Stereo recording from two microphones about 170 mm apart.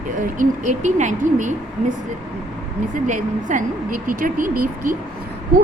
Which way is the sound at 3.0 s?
50° right (ahead or behind).